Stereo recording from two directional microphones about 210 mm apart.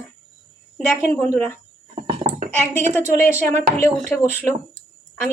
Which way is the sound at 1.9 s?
25° right (ahead or behind).